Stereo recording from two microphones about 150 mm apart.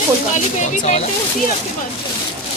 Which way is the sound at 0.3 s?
50° left (ahead or behind).